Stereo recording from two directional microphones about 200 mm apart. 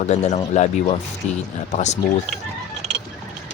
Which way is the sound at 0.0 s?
35° left (ahead or behind).